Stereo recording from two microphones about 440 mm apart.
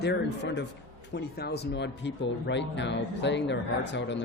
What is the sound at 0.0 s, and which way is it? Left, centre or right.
Speech, left.